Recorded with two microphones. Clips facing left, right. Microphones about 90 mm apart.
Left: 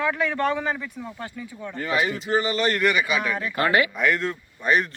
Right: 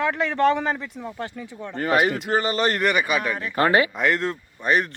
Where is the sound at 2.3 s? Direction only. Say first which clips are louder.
Left 2 dB; 40° right (ahead or behind).